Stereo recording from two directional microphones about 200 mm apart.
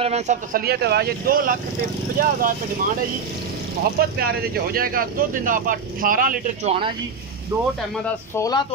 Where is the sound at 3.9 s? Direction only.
50° right (ahead or behind).